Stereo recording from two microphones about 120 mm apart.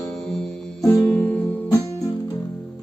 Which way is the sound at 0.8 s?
25° left (ahead or behind).